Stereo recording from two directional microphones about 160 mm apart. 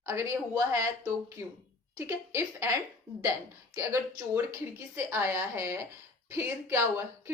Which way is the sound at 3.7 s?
20° right (ahead or behind).